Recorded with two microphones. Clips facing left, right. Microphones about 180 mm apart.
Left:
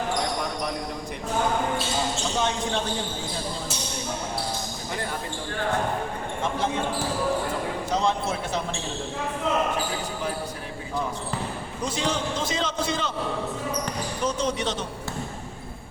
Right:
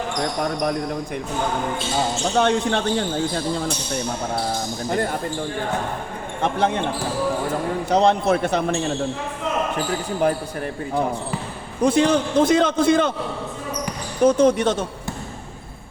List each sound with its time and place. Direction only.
2.4 s a man's voice: 65° right (ahead or behind)
6.4 s a man's voice: 65° right (ahead or behind)
7.9 s a man's voice: 65° right (ahead or behind)
10.2 s a man's voice: 55° right (ahead or behind)
11.8 s a man's voice: 60° right (ahead or behind)
14.2 s speech: 55° right (ahead or behind)